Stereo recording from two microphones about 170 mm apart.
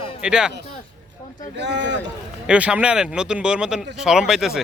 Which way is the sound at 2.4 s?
5° right (ahead or behind).